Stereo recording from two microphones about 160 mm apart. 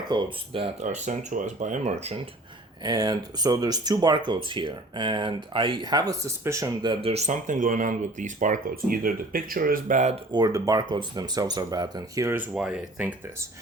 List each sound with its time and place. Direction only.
0.1 s speech: 35° right (ahead or behind)
0.9 s speech: 50° right (ahead or behind)
2.8 s speech: 25° right (ahead or behind)
6.8 s speech: 35° right (ahead or behind); by 10.2 s 50° right (ahead or behind)
10.3 s speech: 25° right (ahead or behind); by 13.1 s 10° right (ahead or behind)